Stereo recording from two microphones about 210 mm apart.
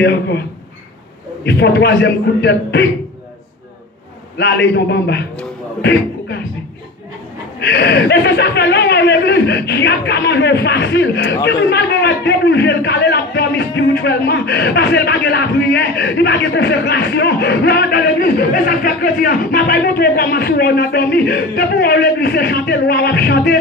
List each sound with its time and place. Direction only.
0.0 s a man's voice: 50° left (ahead or behind)
4.4 s a man's voice: 50° left (ahead or behind)
7.6 s a man's voice: 50° left (ahead or behind)